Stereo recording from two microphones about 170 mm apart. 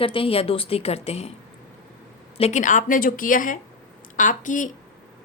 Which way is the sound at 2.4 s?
45° left (ahead or behind).